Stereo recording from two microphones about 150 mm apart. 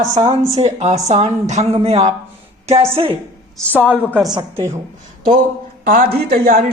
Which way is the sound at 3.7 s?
10° right (ahead or behind).